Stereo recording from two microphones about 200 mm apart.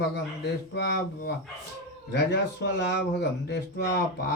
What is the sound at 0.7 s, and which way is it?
Speech, 60° left (ahead or behind).